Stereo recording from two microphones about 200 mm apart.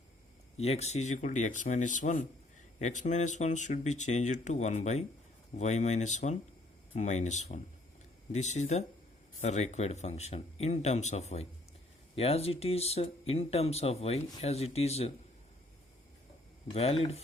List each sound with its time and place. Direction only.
0.5 s speech: 30° left (ahead or behind)
16.7 s speech: 30° left (ahead or behind)